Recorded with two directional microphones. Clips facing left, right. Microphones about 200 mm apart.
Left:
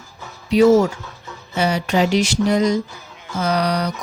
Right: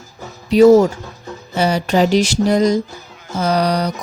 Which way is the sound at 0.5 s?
40° right (ahead or behind).